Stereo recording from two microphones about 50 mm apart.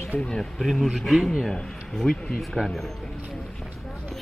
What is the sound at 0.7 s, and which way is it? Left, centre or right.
Speech, centre.